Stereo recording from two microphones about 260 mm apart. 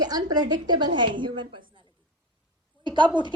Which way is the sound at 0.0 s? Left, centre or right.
Centre.